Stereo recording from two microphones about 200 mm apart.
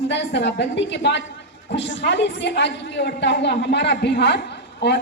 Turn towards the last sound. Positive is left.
turn(degrees=60)  # may be behind; listen again after turning